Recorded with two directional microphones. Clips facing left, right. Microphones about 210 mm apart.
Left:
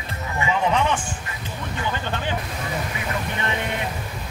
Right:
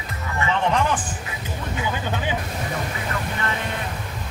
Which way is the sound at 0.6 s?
Centre (ahead or behind).